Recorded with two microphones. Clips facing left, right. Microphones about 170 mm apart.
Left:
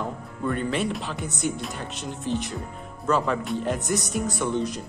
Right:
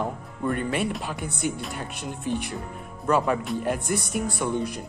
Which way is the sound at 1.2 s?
55° right (ahead or behind).